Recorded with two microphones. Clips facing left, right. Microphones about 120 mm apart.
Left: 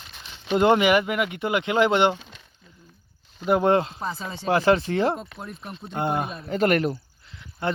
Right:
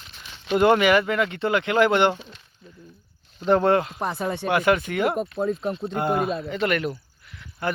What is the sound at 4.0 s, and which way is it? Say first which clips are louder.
Speech: right 5 dB; 60° right (ahead or behind).